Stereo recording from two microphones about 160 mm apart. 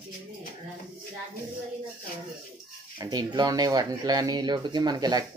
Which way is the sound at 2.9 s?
25° right (ahead or behind).